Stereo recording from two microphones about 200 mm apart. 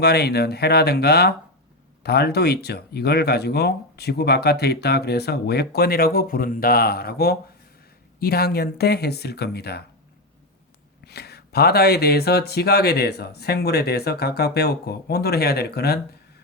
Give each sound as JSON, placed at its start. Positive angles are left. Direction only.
{"t": 0.0, "sound": "speech", "side_deg": 55}
{"t": 11.0, "sound": "speech", "side_deg": 55}